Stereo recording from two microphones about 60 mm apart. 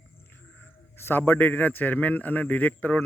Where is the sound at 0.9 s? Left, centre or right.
Left.